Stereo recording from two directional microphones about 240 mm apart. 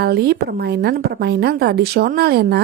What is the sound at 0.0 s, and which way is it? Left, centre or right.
A woman's voice, right.